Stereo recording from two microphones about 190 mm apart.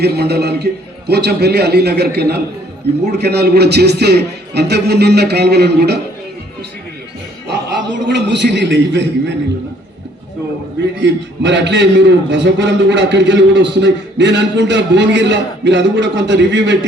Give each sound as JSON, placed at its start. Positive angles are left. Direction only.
{"t": 0.0, "sound": "a man's voice", "side_deg": -60}
{"t": 7.4, "sound": "a man's voice", "side_deg": -65}
{"t": 11.0, "sound": "a man's voice", "side_deg": -65}